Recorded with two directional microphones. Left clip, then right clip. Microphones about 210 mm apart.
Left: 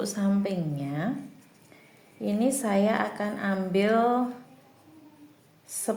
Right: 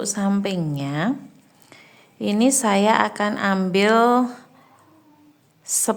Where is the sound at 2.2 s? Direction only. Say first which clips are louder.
Right 8 dB; 30° right (ahead or behind).